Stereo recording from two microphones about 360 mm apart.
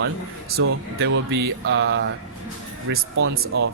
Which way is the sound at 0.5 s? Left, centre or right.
Right.